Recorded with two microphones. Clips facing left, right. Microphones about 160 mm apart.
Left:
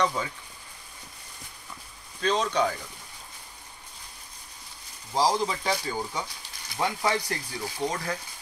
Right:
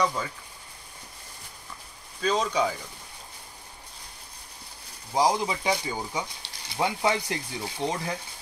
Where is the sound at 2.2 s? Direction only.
5° right (ahead or behind).